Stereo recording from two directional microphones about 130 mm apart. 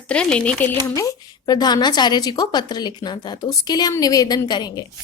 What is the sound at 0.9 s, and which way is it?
A woman's voice, 30° left (ahead or behind).